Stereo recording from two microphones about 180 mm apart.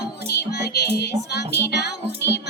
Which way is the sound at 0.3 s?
65° left (ahead or behind).